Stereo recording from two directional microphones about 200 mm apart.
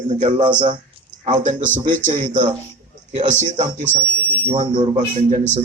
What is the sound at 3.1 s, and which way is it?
Speech, 35° right (ahead or behind).